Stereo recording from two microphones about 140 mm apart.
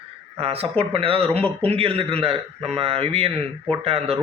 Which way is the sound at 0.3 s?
45° right (ahead or behind).